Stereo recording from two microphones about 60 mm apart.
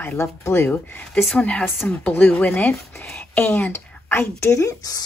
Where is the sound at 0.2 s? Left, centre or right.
Left.